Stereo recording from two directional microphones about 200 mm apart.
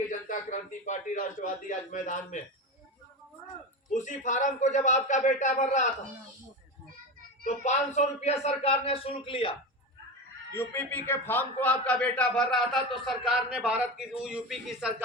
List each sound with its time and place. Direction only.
0.3 s a man's voice: 40° left (ahead or behind)
3.4 s a man's voice: 40° left (ahead or behind)
7.4 s a man's voice: 35° left (ahead or behind)
10.6 s speech: 10° left (ahead or behind)